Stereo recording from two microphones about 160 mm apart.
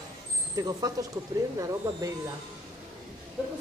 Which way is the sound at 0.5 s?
25° right (ahead or behind).